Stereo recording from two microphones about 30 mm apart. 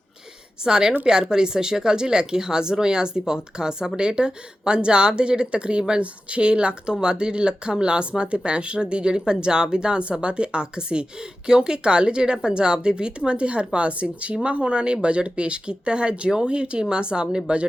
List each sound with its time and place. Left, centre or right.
0.6 s speech: right